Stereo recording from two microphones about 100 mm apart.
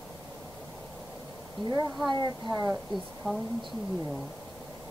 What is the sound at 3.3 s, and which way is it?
Speech, 5° left (ahead or behind).